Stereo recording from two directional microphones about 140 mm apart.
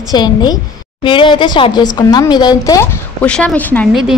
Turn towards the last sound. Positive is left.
turn(degrees=-5)  # may be behind; listen again after turning